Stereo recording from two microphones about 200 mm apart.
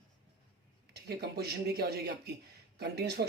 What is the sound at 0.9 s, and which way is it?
Speech, 55° right (ahead or behind).